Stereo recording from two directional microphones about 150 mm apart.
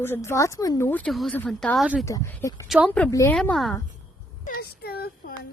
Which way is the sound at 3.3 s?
5° left (ahead or behind).